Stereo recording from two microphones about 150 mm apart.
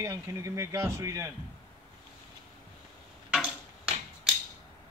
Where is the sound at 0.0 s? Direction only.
20° right (ahead or behind).